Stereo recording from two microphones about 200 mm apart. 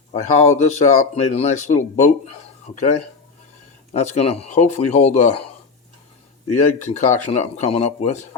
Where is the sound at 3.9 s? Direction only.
30° left (ahead or behind).